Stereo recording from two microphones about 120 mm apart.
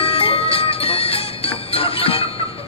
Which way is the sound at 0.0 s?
55° left (ahead or behind).